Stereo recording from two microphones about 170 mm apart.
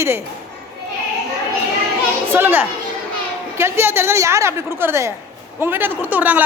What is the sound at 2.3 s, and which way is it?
A woman's voice, 10° right (ahead or behind).